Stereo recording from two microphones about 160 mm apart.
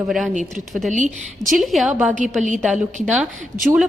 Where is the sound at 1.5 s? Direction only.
Centre (ahead or behind).